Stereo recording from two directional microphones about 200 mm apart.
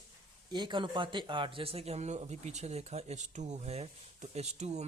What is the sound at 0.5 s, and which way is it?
Speech, 20° right (ahead or behind).